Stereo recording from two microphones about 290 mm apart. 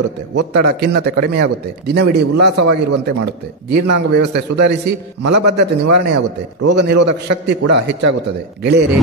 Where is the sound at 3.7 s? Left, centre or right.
Right.